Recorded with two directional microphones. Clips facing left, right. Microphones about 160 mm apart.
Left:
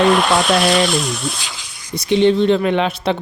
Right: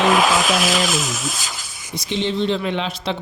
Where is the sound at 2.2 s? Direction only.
55° left (ahead or behind).